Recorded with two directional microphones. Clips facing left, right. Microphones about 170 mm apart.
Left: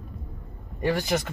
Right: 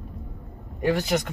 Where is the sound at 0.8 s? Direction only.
Centre (ahead or behind).